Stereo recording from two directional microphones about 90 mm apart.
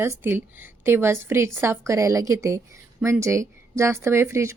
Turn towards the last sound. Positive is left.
turn(degrees=-30)  # may be behind; listen again after turning